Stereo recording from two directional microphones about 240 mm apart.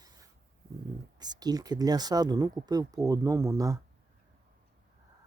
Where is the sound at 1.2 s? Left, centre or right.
Centre.